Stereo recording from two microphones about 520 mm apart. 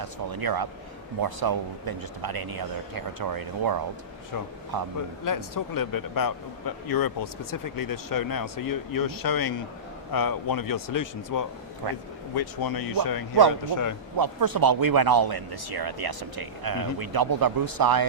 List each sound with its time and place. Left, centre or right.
0.0 s speech: right
5.2 s a man's voice: left
11.8 s speech: right
12.3 s a man's voice: left
14.2 s speech: right